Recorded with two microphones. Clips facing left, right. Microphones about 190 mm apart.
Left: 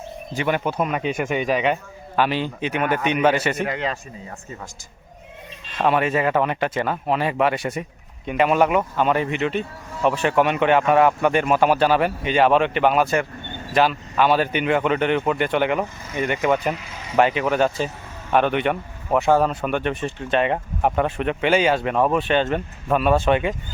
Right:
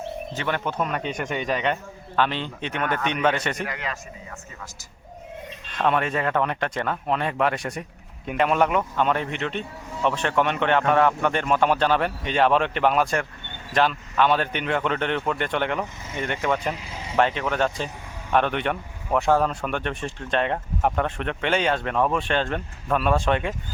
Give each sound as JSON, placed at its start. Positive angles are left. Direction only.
{"t": 0.3, "sound": "a man's voice", "side_deg": 10}
{"t": 3.6, "sound": "a man's voice", "side_deg": 30}
{"t": 5.7, "sound": "a man's voice", "side_deg": 5}
{"t": 16.7, "sound": "vehicle", "side_deg": -30}
{"t": 17.2, "sound": "speech", "side_deg": 5}